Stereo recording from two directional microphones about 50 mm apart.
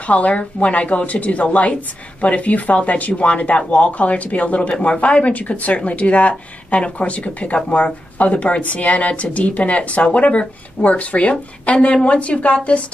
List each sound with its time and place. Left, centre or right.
0.0 s speech: left